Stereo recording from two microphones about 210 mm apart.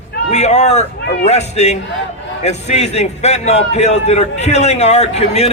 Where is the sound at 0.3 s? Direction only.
30° left (ahead or behind).